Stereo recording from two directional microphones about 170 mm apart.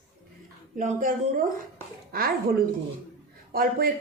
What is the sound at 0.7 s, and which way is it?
Speech, 50° right (ahead or behind).